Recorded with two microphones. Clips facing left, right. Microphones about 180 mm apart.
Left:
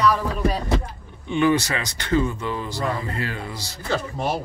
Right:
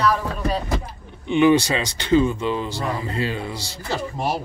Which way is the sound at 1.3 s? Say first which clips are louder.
Right 4 dB; 20° right (ahead or behind).